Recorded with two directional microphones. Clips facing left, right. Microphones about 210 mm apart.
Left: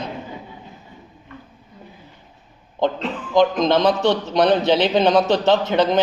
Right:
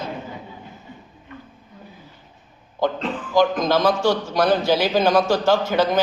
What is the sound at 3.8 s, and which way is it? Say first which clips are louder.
A man's voice: left 1 dB; 20° left (ahead or behind).